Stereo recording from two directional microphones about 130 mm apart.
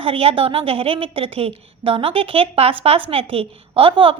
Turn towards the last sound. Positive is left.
turn(degrees=-45)  # may be behind; listen again after turning